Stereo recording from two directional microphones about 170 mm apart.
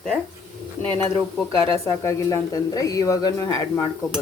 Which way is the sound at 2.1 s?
15° left (ahead or behind).